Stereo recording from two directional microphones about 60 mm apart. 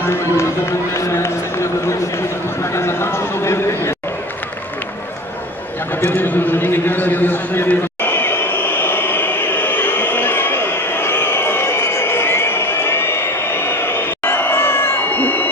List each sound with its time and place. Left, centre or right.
0.0 s run: left
2.6 s a man's voice: left
6.0 s a sound: left